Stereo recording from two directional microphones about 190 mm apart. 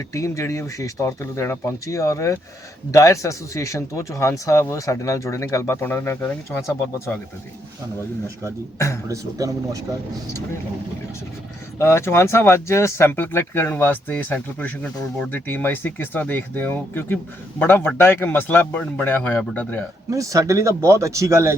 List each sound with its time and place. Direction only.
0.1 s speech: 15° left (ahead or behind)
9.0 s speech: 15° right (ahead or behind)
11.8 s speech: 15° left (ahead or behind)
20.1 s speech: 15° right (ahead or behind)